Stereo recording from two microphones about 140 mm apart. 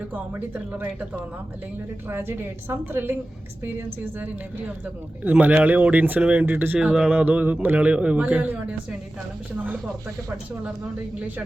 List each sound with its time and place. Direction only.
0.1 s speech: 10° right (ahead or behind)